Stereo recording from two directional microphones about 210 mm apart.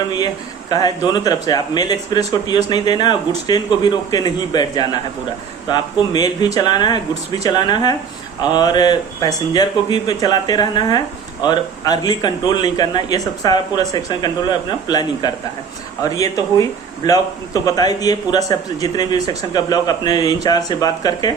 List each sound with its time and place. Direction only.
0.7 s a man's voice: 20° left (ahead or behind)